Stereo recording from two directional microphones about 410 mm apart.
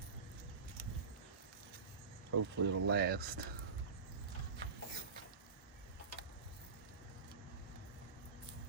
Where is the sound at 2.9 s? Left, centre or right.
Right.